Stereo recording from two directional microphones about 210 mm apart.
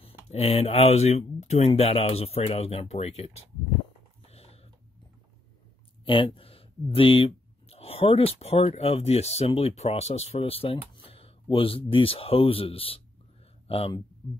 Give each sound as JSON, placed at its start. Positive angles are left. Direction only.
{"t": 0.3, "sound": "speech", "side_deg": 30}
{"t": 4.3, "sound": "a sound", "side_deg": 30}
{"t": 6.0, "sound": "speech", "side_deg": 25}